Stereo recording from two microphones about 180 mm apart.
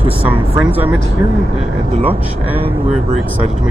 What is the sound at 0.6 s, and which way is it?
Speech, 10° right (ahead or behind).